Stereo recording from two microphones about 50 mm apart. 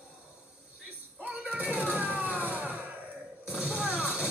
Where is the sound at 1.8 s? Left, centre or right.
Right.